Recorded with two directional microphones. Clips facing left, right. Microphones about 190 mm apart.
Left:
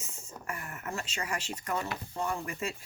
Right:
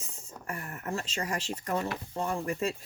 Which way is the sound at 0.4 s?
35° right (ahead or behind).